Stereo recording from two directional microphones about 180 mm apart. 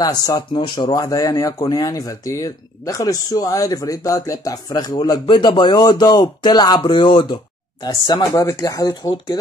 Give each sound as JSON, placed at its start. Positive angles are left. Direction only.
{"t": 0.0, "sound": "speech", "side_deg": 20}